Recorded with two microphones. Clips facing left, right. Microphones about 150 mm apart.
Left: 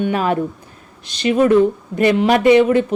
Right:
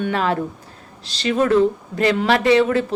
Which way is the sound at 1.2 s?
15° left (ahead or behind).